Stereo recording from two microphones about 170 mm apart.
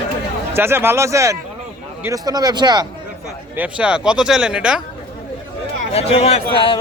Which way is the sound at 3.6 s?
5° right (ahead or behind).